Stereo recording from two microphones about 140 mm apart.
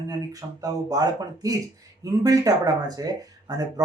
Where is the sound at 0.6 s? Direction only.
25° right (ahead or behind).